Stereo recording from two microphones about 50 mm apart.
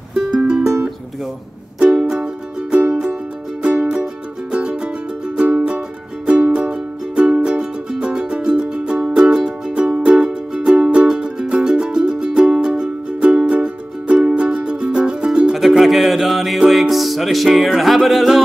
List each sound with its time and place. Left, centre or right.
0.1 s music: centre
1.8 s music: centre
15.5 s music: centre
17.5 s speech: centre